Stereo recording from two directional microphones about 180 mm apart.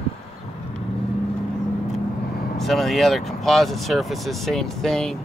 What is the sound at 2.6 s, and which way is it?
Speech, centre (ahead or behind).